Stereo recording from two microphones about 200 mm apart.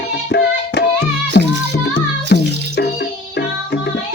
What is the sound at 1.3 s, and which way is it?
Music, 60° left (ahead or behind).